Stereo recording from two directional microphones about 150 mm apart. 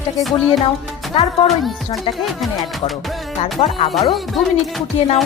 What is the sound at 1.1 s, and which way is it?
Speech, 40° left (ahead or behind).